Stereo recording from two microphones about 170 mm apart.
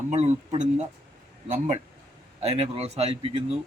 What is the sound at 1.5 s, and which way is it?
Speech, 45° right (ahead or behind).